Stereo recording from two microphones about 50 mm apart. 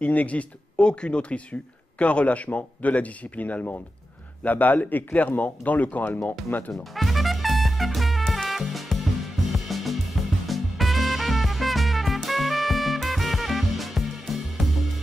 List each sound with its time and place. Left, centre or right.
0.0 s speech: left
6.7 s music: centre
9.7 s drum kit: centre
10.2 s music: centre